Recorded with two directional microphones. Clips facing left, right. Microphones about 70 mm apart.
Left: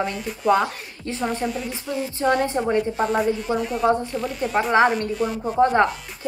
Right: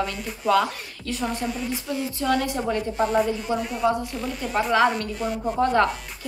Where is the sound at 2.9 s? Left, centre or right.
Centre.